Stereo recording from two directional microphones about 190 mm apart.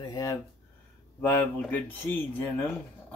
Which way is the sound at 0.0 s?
20° left (ahead or behind).